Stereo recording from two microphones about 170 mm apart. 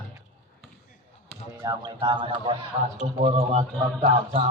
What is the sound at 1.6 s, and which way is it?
Speech, 25° right (ahead or behind).